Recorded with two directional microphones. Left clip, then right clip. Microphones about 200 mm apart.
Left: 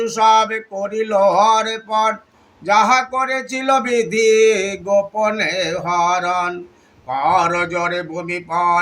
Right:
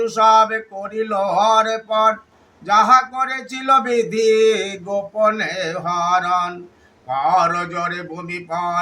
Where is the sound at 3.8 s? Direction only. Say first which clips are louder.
Left 1 dB; 35° right (ahead or behind).